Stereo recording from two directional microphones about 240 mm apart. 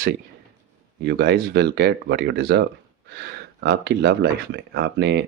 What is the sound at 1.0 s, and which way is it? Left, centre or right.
Speech, right.